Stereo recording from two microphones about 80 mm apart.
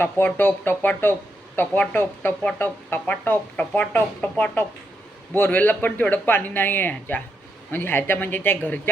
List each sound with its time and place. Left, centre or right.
0.3 s speech: left